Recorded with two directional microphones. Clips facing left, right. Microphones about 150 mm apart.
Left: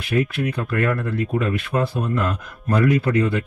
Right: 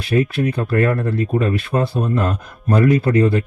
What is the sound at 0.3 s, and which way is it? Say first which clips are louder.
A man's voice: right 5 dB; 35° right (ahead or behind).